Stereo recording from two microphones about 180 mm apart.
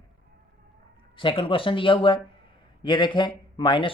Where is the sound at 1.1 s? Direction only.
30° left (ahead or behind).